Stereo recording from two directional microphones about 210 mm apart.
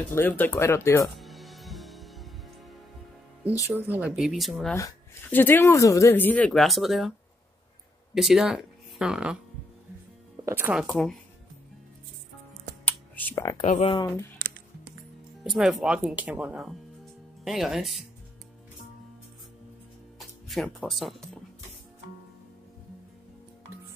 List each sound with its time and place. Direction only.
0.1 s speech: 10° left (ahead or behind)
1.1 s music: centre (ahead or behind)
3.6 s speech: 10° right (ahead or behind)
4.7 s speech: 10° left (ahead or behind); by 9.4 s 5° right (ahead or behind)
10.4 s speech: 10° right (ahead or behind)
12.8 s a sound: 10° left (ahead or behind)
13.6 s speech: 30° left (ahead or behind)
14.4 s music: 15° right (ahead or behind)
15.4 s speech: centre (ahead or behind)
20.2 s speech: centre (ahead or behind)